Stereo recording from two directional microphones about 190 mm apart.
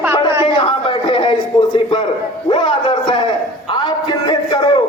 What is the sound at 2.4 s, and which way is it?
Speech, 25° left (ahead or behind).